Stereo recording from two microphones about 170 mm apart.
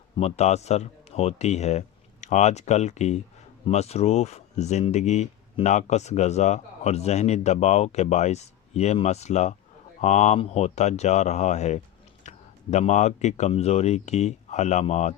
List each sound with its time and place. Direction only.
0.2 s speech: 40° left (ahead or behind)